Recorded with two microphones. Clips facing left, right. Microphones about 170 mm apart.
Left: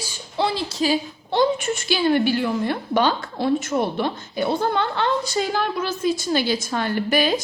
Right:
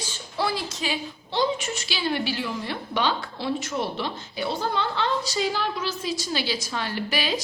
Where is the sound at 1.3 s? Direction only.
55° left (ahead or behind).